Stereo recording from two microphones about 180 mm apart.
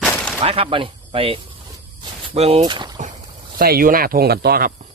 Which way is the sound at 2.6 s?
25° right (ahead or behind).